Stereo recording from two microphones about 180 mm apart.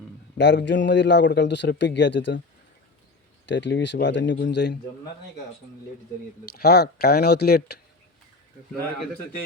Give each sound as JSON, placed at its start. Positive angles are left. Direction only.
{"t": 0.3, "sound": "a man's voice", "side_deg": 75}
{"t": 3.4, "sound": "a man's voice", "side_deg": 80}
{"t": 6.6, "sound": "speech", "side_deg": 60}